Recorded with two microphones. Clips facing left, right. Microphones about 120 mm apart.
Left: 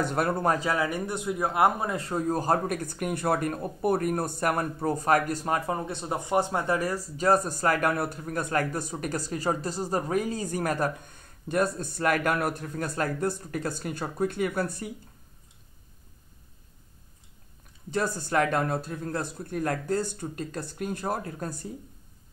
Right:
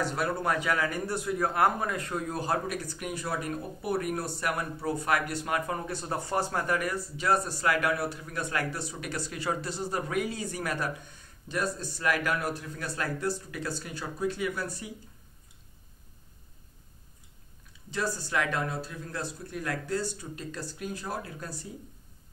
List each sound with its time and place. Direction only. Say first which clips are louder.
0.0 s speech: left 4 dB; 50° left (ahead or behind)
0.5 s speech: left 2 dB; 35° left (ahead or behind)
0.7 s speech: left 2 dB; 20° left (ahead or behind); by 5.6 s 40° left (ahead or behind)
5.7 s speech: left 3 dB; 25° left (ahead or behind); by 14.9 s 55° left (ahead or behind)
17.9 s speech: left 4 dB; 50° left (ahead or behind)